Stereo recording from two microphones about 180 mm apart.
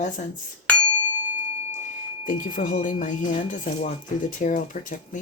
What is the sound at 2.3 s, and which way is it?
Speech, 50° left (ahead or behind).